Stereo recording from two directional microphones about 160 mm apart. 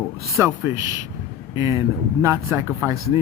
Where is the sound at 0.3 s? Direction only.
15° right (ahead or behind).